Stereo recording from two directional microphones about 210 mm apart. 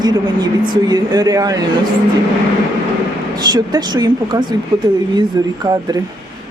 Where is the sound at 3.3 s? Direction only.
20° right (ahead or behind).